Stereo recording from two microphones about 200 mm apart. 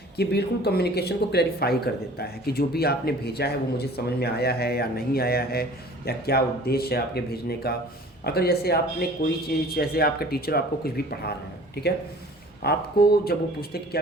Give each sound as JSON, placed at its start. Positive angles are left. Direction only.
{"t": 0.2, "sound": "speech", "side_deg": 55}